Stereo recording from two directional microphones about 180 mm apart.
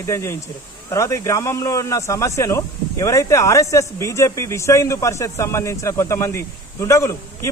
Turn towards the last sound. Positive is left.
turn(degrees=15)  # may be behind; listen again after turning